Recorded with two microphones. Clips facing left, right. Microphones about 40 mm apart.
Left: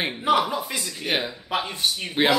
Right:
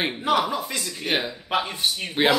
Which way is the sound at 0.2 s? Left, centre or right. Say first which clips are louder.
Left 3 dB; centre.